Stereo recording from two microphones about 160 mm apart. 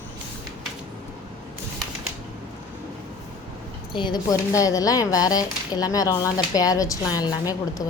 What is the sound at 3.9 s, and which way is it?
Speech, 25° left (ahead or behind).